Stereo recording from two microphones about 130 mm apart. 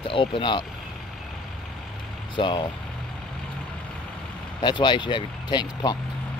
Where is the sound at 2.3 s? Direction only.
35° left (ahead or behind).